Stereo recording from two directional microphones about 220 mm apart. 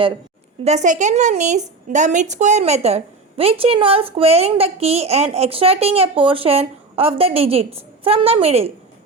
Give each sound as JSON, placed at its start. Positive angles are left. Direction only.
{"t": 0.6, "sound": "a woman's voice", "side_deg": -30}